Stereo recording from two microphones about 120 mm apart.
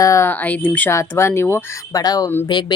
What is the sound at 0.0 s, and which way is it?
Speech, 25° left (ahead or behind).